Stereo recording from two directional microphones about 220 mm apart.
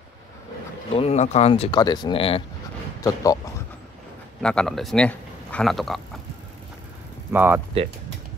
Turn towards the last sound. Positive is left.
turn(degrees=-10)  # may be behind; listen again after turning